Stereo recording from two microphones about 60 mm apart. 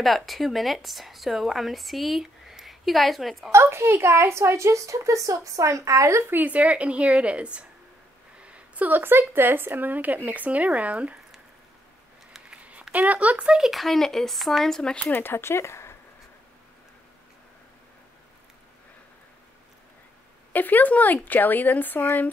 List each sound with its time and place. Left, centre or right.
0.0 s a woman's voice: centre
3.5 s a woman's voice: right
6.2 s speech: right
8.4 s a sound: right
9.0 s speech: right
12.3 s a sound: centre
12.9 s speech: right
13.6 s a woman's voice: centre
15.1 s speech: left
20.5 s speech: left